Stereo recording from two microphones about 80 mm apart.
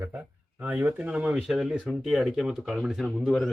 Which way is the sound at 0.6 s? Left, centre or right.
Centre.